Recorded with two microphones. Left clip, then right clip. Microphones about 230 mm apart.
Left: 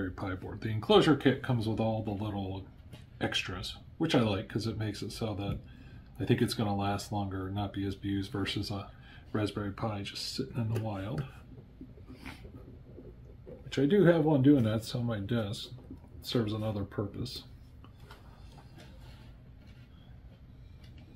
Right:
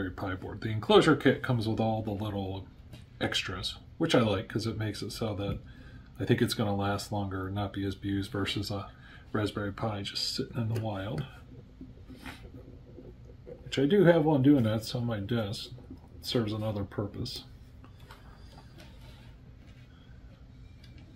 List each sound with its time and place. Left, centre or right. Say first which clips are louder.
0.0 s speech: right 2 dB; centre
13.7 s speech: right 2 dB; centre